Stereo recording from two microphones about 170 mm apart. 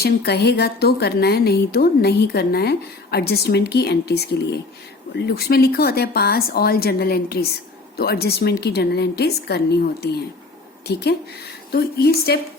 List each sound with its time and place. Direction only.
0.0 s a woman's voice: 70° left (ahead or behind)